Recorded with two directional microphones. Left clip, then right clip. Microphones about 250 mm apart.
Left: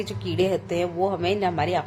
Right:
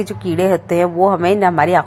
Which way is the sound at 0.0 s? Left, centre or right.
Centre.